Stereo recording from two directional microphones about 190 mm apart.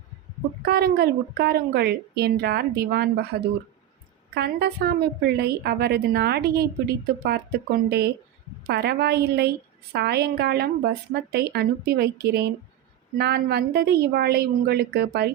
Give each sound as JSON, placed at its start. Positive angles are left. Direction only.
{"t": 0.6, "sound": "a woman's voice", "side_deg": -55}